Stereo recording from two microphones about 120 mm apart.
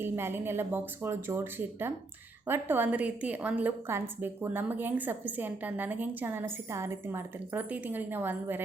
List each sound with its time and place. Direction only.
0.0 s a woman's voice: 20° right (ahead or behind)